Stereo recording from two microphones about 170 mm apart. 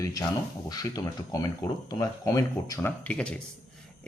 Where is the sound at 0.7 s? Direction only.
20° left (ahead or behind).